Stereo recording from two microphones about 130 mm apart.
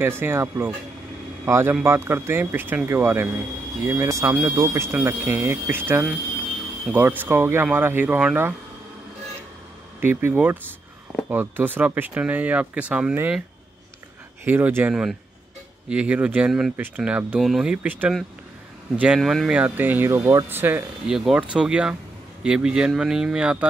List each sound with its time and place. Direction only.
0.0 s speech: 15° right (ahead or behind)
10.0 s speech: 15° right (ahead or behind)
14.4 s speech: 15° right (ahead or behind)
18.9 s speech: 5° right (ahead or behind)